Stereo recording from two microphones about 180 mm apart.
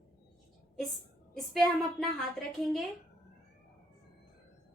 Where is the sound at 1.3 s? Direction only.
Centre (ahead or behind).